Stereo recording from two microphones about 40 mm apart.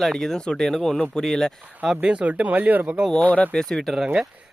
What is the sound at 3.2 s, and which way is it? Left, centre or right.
Speech, left.